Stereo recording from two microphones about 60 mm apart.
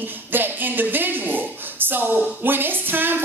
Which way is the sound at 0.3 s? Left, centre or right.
Right.